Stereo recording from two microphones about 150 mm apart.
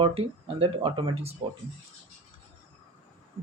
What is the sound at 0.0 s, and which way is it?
Speech, 40° right (ahead or behind).